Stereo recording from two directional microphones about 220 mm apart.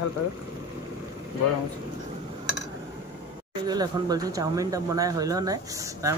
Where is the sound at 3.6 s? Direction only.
15° right (ahead or behind).